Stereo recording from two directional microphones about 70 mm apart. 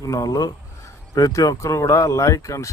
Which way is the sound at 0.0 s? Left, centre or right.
Left.